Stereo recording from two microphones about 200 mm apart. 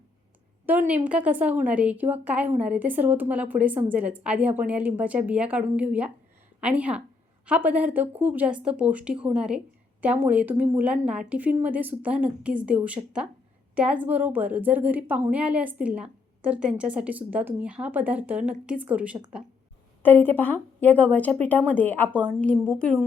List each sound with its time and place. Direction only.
0.6 s a woman's voice: 10° right (ahead or behind)
20.0 s a woman's voice: 10° left (ahead or behind)